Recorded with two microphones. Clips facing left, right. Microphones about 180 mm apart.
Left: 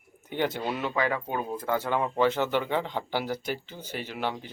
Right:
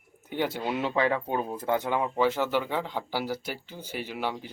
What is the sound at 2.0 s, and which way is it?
Speech, 5° right (ahead or behind).